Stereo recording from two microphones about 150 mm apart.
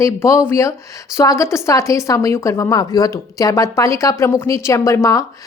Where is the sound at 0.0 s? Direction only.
20° left (ahead or behind).